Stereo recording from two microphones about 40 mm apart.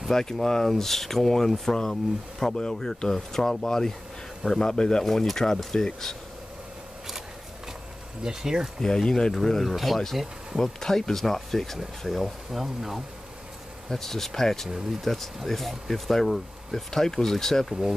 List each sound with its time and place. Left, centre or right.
0.1 s speech: centre
5.0 s speech: centre
8.2 s speech: centre
8.8 s speech: centre
10.6 s speech: centre
12.4 s speech: centre
13.8 s speech: centre